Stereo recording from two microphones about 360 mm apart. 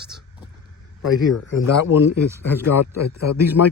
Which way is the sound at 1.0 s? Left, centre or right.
Left.